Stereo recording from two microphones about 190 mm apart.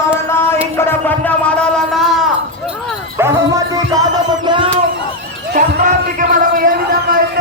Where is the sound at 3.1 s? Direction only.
15° right (ahead or behind).